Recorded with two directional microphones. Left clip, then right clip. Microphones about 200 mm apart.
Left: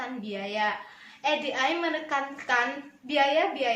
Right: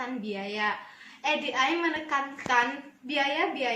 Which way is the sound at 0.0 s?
15° left (ahead or behind).